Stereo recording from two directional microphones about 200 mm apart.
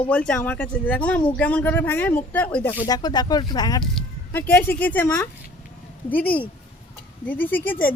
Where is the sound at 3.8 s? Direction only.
5° left (ahead or behind).